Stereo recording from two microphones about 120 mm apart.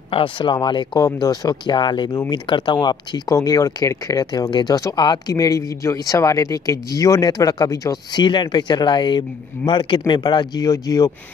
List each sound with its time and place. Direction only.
0.1 s speech: 45° left (ahead or behind)